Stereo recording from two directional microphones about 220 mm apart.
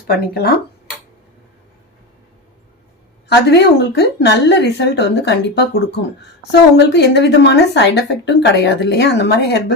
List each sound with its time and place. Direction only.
0.1 s a woman's voice: 45° left (ahead or behind)
3.2 s a woman's voice: 50° left (ahead or behind)
6.5 s a woman's voice: 50° left (ahead or behind)